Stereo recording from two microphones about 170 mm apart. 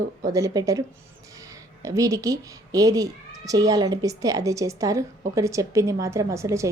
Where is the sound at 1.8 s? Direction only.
20° right (ahead or behind).